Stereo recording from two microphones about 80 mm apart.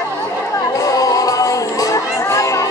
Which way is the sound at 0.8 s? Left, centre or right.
Left.